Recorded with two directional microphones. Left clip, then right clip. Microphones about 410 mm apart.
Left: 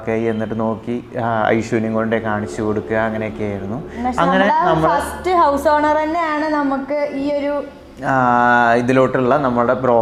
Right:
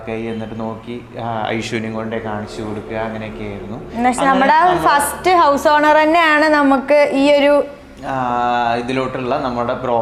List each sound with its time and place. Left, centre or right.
0.1 s speech: left
4.4 s a woman's voice: right
8.0 s speech: left